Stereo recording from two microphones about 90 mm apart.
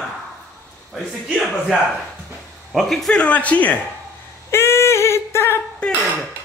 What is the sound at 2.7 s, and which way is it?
Speech, centre (ahead or behind).